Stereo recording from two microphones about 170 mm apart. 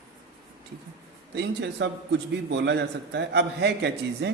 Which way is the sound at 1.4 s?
90° right.